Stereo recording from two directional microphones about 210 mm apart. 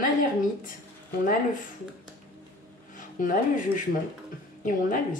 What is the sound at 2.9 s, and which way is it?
Speech, 40° left (ahead or behind).